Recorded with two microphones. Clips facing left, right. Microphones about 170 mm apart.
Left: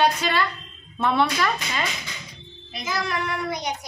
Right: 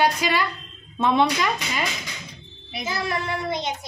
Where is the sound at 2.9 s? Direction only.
25° right (ahead or behind).